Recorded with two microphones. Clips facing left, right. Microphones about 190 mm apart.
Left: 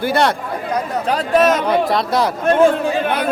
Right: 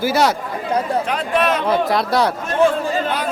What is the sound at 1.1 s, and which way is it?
Speech, 40° left (ahead or behind).